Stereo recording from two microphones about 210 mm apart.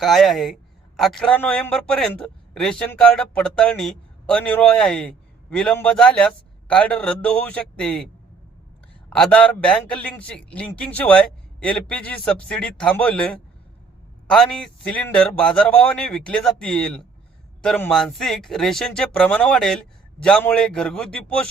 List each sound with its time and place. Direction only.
0.0 s a man's voice: centre (ahead or behind)
9.0 s a man's voice: 5° left (ahead or behind)